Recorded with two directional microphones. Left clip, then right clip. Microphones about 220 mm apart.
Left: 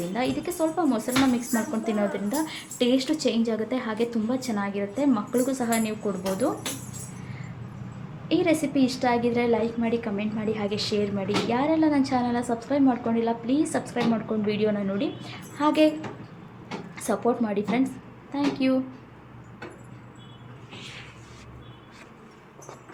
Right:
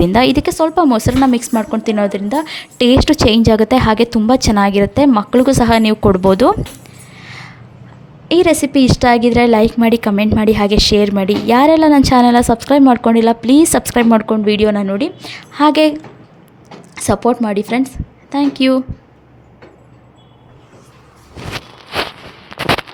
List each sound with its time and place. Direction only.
0.1 s a woman's voice: 50° right (ahead or behind)
8.3 s a woman's voice: 50° right (ahead or behind)
16.9 s a woman's voice: 45° right (ahead or behind)